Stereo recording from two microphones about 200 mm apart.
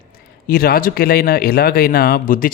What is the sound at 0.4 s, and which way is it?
Speech, 50° left (ahead or behind).